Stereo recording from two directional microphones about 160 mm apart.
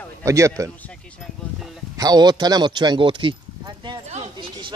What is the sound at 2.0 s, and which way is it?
A man's voice, 25° right (ahead or behind).